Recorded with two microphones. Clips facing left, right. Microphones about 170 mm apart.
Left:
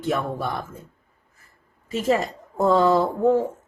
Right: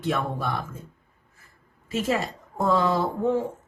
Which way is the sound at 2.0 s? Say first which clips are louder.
Left 4 dB; 40° left (ahead or behind).